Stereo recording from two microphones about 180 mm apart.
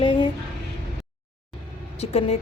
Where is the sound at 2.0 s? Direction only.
35° left (ahead or behind).